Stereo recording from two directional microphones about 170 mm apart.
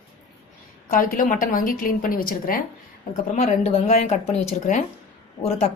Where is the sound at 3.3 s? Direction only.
40° left (ahead or behind).